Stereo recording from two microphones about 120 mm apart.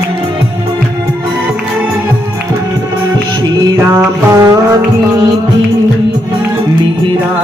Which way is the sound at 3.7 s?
25° right (ahead or behind).